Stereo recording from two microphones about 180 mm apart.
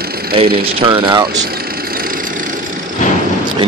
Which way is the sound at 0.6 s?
30° right (ahead or behind).